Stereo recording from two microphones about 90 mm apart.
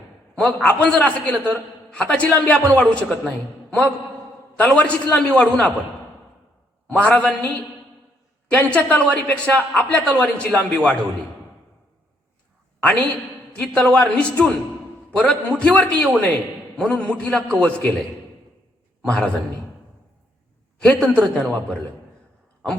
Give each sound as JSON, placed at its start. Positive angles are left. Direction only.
{"t": 0.3, "sound": "a man's voice", "side_deg": 15}
{"t": 6.9, "sound": "a man's voice", "side_deg": 15}
{"t": 12.8, "sound": "a woman's voice", "side_deg": 10}
{"t": 19.0, "sound": "a man's voice", "side_deg": 15}
{"t": 20.8, "sound": "a man's voice", "side_deg": 10}